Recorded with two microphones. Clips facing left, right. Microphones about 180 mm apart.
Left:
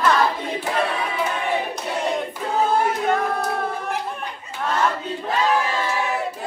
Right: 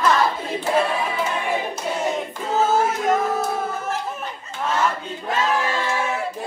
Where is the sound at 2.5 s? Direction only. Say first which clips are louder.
Right 1 dB; 5° right (ahead or behind).